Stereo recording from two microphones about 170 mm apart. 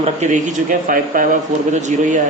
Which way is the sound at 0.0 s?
45° right (ahead or behind).